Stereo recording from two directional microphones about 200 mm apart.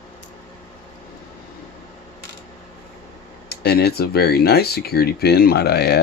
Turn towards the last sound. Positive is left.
turn(degrees=50)  # may be behind; listen again after turning